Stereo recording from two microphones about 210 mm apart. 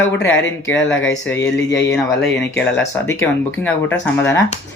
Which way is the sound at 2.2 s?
5° left (ahead or behind).